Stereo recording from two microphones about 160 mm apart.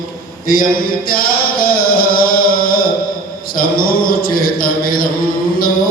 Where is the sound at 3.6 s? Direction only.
65° left (ahead or behind).